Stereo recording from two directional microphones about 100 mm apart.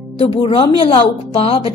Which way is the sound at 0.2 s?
65° left (ahead or behind).